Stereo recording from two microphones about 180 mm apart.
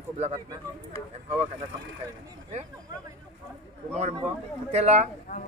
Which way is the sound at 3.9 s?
35° right (ahead or behind).